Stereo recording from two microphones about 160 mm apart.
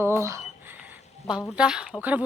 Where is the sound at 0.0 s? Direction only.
15° right (ahead or behind).